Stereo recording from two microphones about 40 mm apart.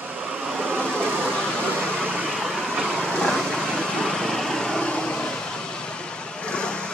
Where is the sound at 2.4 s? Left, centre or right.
Centre.